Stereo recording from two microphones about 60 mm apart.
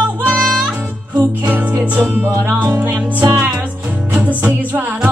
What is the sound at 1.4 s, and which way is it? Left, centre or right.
Music, right.